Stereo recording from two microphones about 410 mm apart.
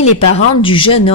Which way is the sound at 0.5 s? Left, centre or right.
Centre.